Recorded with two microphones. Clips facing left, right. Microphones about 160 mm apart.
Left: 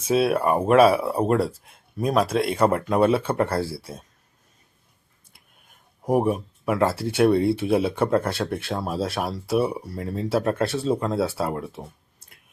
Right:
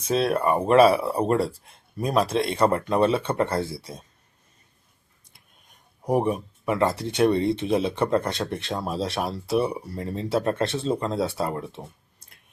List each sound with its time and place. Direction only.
0.0 s speech: 5° left (ahead or behind)
5.3 s speech: 5° left (ahead or behind)